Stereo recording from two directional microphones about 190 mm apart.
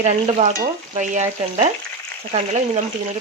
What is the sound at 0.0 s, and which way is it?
Speech, 40° right (ahead or behind).